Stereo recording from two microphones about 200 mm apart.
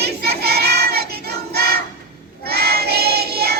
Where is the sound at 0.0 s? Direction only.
55° right (ahead or behind).